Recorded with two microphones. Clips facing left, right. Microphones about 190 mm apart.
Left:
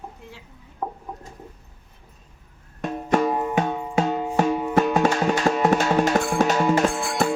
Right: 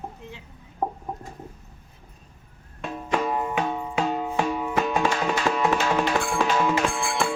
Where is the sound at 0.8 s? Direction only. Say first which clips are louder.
Right 3 dB; 35° right (ahead or behind).